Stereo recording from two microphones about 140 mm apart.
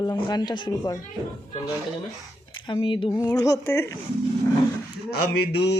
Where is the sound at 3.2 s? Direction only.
25° left (ahead or behind).